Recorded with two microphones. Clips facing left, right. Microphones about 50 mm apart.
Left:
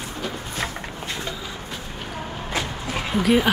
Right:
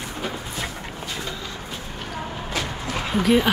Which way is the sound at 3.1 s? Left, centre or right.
Centre.